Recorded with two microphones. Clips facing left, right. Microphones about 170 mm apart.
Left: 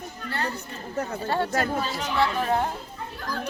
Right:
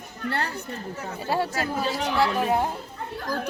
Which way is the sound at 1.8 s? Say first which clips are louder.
Right 3 dB; 65° right (ahead or behind).